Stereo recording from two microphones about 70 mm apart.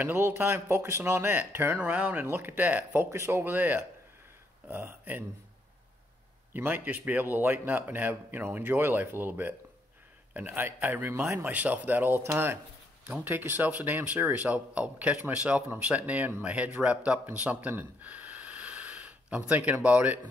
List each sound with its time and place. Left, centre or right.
0.0 s speech: right
1.8 s speech: centre
6.5 s speech: right